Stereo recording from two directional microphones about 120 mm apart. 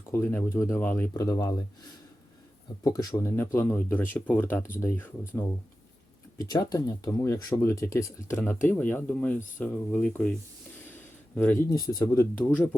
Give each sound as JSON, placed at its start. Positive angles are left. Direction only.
{"t": 0.1, "sound": "speech", "side_deg": 20}
{"t": 1.1, "sound": "speech", "side_deg": 25}
{"t": 2.8, "sound": "speech", "side_deg": 30}
{"t": 6.3, "sound": "speech", "side_deg": 30}
{"t": 11.3, "sound": "speech", "side_deg": 20}
{"t": 11.9, "sound": "speech", "side_deg": 35}
{"t": 12.4, "sound": "speech", "side_deg": 15}